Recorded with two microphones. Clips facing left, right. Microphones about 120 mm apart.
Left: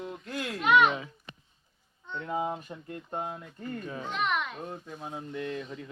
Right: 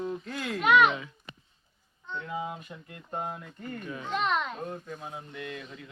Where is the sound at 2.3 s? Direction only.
35° left (ahead or behind).